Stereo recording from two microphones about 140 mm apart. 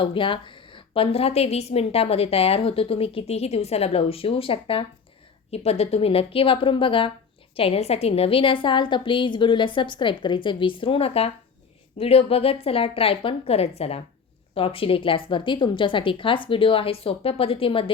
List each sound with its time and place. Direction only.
0.0 s a woman's voice: 40° left (ahead or behind)